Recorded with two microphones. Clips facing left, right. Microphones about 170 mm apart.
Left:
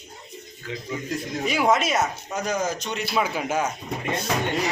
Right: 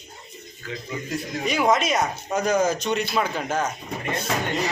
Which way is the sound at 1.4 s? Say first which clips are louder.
Even; 5° left (ahead or behind).